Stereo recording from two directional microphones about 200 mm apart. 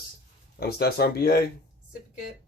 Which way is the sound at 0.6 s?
50° left (ahead or behind).